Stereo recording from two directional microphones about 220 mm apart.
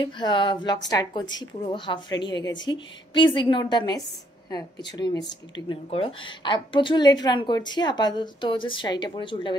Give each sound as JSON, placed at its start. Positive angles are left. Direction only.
{"t": 0.0, "sound": "a woman's voice", "side_deg": 20}